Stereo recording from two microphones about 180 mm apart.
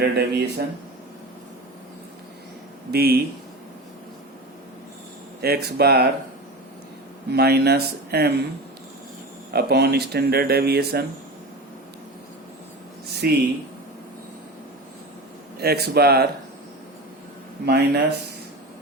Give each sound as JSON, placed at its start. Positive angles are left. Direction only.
{"t": 0.0, "sound": "speech", "side_deg": -65}
{"t": 2.9, "sound": "speech", "side_deg": -60}
{"t": 5.4, "sound": "speech", "side_deg": -60}
{"t": 7.3, "sound": "speech", "side_deg": -65}
{"t": 9.5, "sound": "speech", "side_deg": -60}
{"t": 13.2, "sound": "speech", "side_deg": -60}
{"t": 15.5, "sound": "speech", "side_deg": -60}
{"t": 17.7, "sound": "speech", "side_deg": -70}